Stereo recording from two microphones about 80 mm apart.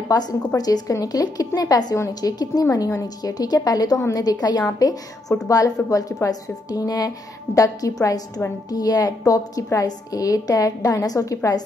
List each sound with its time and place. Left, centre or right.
0.1 s a woman's voice: left